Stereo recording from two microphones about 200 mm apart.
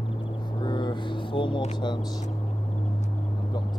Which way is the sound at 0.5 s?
20° left (ahead or behind).